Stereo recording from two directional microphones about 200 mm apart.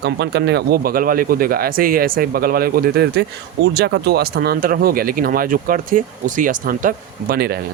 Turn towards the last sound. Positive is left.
turn(degrees=-50)  # may be behind; listen again after turning